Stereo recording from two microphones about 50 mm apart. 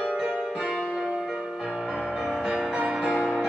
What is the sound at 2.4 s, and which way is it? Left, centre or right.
Music, centre.